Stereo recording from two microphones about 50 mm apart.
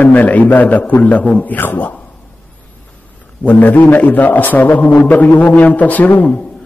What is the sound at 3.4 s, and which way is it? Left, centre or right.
A man's voice, left.